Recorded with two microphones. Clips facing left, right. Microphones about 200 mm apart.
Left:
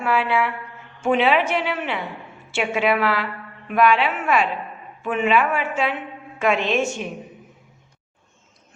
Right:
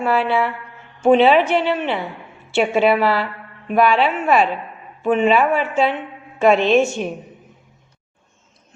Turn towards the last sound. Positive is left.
turn(degrees=-35)  # may be behind; listen again after turning